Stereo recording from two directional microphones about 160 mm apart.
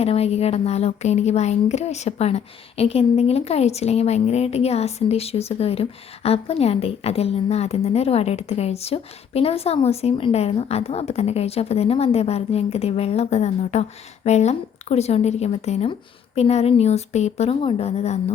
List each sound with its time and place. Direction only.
0.0 s speech: 40° left (ahead or behind)